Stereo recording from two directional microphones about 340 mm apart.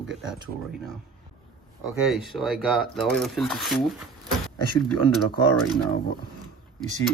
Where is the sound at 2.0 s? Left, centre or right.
Centre.